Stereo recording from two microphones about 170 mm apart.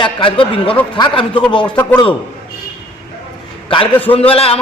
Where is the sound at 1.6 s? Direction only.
10° left (ahead or behind).